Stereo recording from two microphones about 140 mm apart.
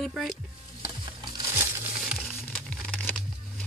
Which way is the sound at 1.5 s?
20° right (ahead or behind).